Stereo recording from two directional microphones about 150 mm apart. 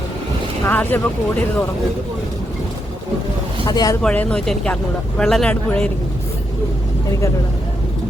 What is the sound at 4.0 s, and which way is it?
Speech, 5° left (ahead or behind).